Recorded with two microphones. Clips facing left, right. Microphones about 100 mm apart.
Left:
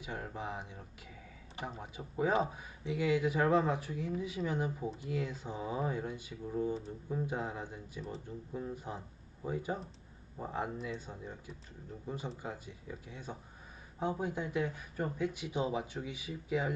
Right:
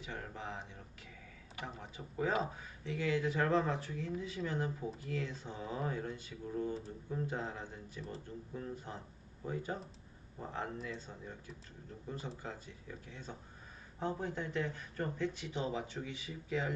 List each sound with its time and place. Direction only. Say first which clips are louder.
0.0 s speech: left 3 dB; 15° left (ahead or behind)